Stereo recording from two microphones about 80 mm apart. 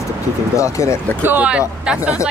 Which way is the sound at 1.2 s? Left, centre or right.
Centre.